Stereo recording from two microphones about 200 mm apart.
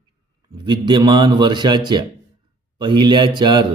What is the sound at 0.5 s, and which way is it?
A man's voice, 20° right (ahead or behind).